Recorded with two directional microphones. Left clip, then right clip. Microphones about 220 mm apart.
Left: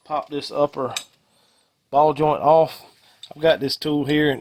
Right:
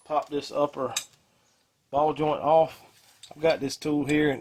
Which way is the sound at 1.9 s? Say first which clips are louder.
Left 7 dB; 45° left (ahead or behind).